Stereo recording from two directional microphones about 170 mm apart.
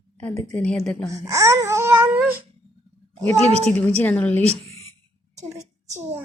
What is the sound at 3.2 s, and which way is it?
Speech, 35° right (ahead or behind).